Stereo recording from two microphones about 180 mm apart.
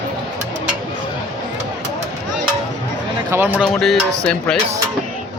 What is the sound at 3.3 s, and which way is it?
Speech, 15° right (ahead or behind).